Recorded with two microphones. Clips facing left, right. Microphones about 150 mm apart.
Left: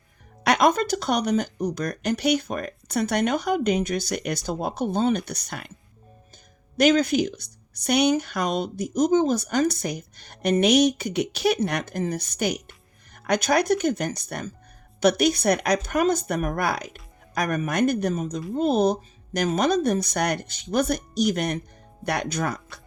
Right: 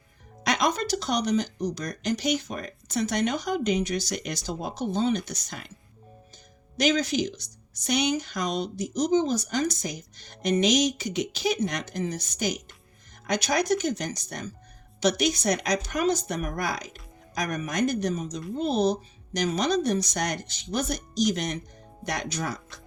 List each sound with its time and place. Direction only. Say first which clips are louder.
0.4 s speech: left 6 dB; 55° left (ahead or behind)
6.7 s speech: left 5 dB; 55° left (ahead or behind)